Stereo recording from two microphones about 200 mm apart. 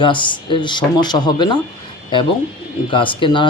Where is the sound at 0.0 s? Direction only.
25° left (ahead or behind).